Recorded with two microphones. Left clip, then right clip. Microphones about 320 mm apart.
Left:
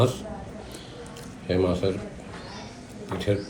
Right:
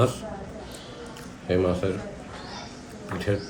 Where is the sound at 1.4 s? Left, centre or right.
Centre.